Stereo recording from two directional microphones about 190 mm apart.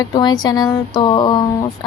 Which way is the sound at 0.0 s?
20° left (ahead or behind).